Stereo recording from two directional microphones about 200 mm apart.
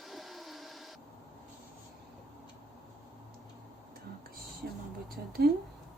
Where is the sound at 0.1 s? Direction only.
Centre (ahead or behind).